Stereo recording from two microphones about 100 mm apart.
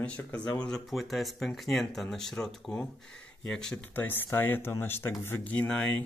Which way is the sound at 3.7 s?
20° left (ahead or behind).